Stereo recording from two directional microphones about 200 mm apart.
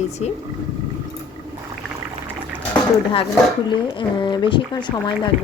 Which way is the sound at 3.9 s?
25° left (ahead or behind).